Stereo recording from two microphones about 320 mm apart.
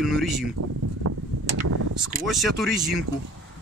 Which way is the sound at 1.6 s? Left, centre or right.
Right.